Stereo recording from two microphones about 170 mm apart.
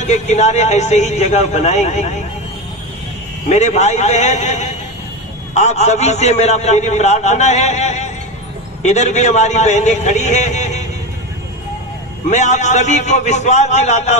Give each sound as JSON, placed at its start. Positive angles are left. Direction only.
{"t": 0.0, "sound": "a man's voice", "side_deg": 40}
{"t": 3.4, "sound": "a man's voice", "side_deg": 45}
{"t": 12.3, "sound": "a man's voice", "side_deg": 45}